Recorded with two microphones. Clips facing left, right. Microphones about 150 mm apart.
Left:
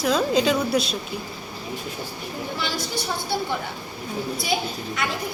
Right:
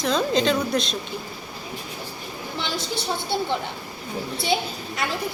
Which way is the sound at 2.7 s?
25° right (ahead or behind).